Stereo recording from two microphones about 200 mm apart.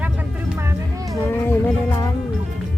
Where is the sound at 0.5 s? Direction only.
15° right (ahead or behind).